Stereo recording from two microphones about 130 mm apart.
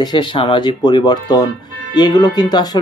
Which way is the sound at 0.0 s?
35° left (ahead or behind).